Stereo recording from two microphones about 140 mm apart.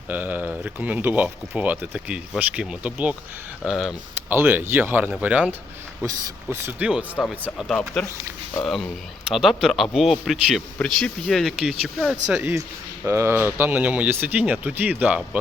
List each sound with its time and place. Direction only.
0.1 s speech: 10° right (ahead or behind)
4.3 s speech: 15° right (ahead or behind)
6.1 s speech: 20° right (ahead or behind)
7.4 s speech: 5° left (ahead or behind)
12.3 s speech: 15° right (ahead or behind)